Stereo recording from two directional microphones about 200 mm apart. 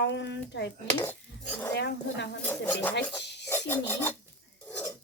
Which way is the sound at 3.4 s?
10° left (ahead or behind).